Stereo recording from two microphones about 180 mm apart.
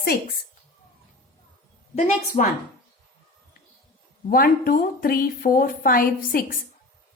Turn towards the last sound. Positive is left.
turn(degrees=50)  # may be behind; listen again after turning